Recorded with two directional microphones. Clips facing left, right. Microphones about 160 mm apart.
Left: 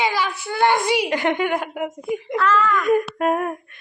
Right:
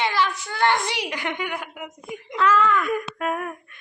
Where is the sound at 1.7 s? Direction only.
50° left (ahead or behind).